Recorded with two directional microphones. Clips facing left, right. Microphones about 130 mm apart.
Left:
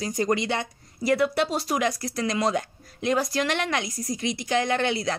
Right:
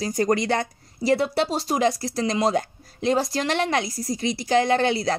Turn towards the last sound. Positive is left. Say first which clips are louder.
# right 4 dB
turn(degrees=-35)  # may be behind; listen again after turning